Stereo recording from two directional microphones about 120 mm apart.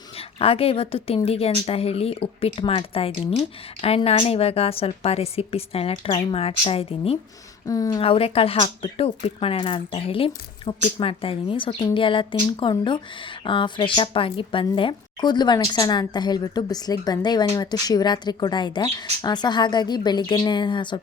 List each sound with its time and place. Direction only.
0.2 s a woman's voice: 55° left (ahead or behind)
7.7 s speech: 30° left (ahead or behind)
8.0 s a woman's voice: 50° left (ahead or behind)